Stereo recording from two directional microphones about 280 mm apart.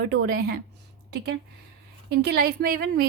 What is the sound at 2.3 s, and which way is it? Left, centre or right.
Speech, right.